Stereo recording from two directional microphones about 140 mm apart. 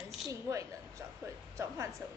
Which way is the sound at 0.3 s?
20° right (ahead or behind).